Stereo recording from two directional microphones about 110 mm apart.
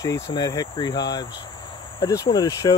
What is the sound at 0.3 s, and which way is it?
Speech, 35° left (ahead or behind).